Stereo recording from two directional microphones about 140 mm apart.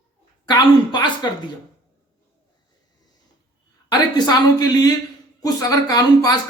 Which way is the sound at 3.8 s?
30° left (ahead or behind).